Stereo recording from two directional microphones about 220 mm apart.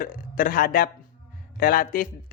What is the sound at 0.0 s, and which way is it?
A man's voice, 40° left (ahead or behind).